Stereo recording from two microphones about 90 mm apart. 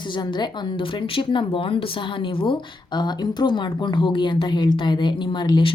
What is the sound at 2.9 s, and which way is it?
Speech, 55° left (ahead or behind).